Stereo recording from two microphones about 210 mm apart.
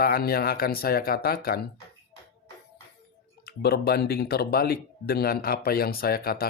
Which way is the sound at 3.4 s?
50° left (ahead or behind).